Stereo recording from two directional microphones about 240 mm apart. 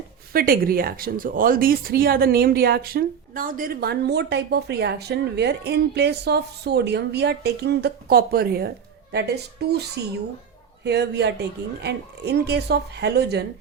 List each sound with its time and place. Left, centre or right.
0.3 s speech: right